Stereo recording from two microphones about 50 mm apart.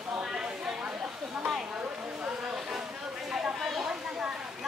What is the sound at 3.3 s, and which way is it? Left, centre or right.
Chatter, centre.